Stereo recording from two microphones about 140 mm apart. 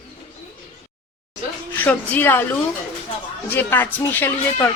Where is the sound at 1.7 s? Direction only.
15° left (ahead or behind).